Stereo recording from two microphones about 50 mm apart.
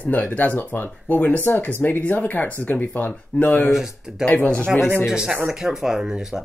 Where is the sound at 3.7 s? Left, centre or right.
Centre.